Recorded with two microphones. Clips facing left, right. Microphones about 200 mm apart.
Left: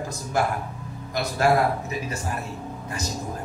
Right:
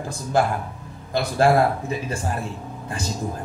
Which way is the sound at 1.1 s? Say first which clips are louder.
Right 3 dB; 30° right (ahead or behind).